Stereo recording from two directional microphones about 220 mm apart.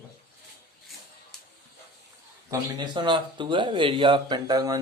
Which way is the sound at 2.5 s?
20° right (ahead or behind).